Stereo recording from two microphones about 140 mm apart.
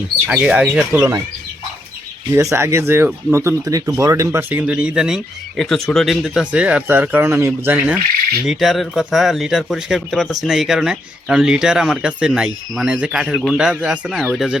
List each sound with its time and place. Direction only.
0.3 s speech: 10° right (ahead or behind)
2.3 s speech: 20° right (ahead or behind)
8.4 s speech: centre (ahead or behind)